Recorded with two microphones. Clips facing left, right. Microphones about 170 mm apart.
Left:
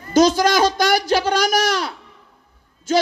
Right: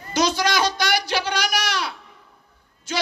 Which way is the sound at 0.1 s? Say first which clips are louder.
Left 7 dB; 45° left (ahead or behind).